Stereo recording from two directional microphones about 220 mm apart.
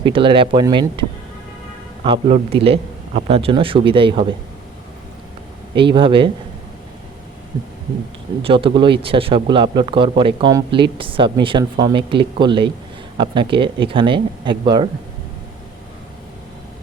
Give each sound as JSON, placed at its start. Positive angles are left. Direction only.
{"t": 0.0, "sound": "speech", "side_deg": -25}
{"t": 2.3, "sound": "speech", "side_deg": -25}
{"t": 5.7, "sound": "speech", "side_deg": -20}
{"t": 8.4, "sound": "speech", "side_deg": -25}